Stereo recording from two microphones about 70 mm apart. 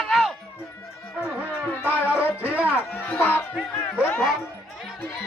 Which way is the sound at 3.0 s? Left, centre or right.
Left.